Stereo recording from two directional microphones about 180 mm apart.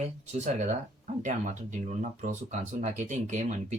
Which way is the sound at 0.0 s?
40° right (ahead or behind).